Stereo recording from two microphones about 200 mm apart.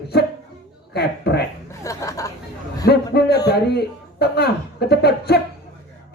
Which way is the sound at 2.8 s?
50° left (ahead or behind).